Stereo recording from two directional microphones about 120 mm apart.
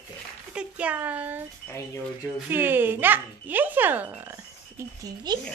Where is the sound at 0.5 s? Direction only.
10° right (ahead or behind).